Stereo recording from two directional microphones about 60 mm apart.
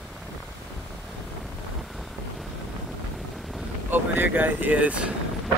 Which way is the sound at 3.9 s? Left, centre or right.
Right.